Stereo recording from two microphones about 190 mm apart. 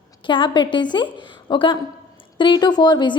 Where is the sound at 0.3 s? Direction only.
25° left (ahead or behind).